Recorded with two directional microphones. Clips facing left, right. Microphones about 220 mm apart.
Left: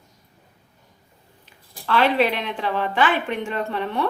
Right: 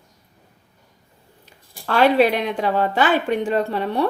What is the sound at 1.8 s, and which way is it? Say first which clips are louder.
Speech: right 4 dB; 45° right (ahead or behind).